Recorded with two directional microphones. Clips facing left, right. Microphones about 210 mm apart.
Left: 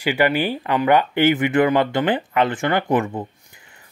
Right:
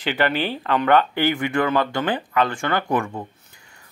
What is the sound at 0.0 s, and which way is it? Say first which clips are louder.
Speech: left 3 dB; 10° left (ahead or behind).